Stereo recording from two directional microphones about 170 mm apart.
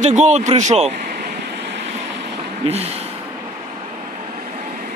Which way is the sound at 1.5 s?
90° right.